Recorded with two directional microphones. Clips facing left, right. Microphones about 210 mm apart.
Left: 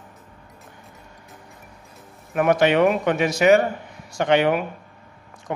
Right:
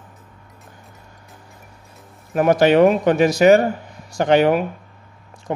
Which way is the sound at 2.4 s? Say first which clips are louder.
Right 4 dB; 35° right (ahead or behind).